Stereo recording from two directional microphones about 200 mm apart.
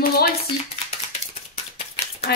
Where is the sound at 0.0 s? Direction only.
50° left (ahead or behind).